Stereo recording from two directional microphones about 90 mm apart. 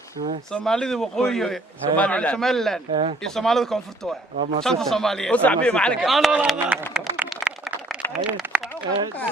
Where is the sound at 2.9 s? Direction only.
90° right.